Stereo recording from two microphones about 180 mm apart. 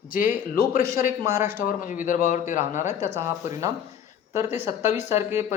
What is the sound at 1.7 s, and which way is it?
A man's voice, 50° left (ahead or behind).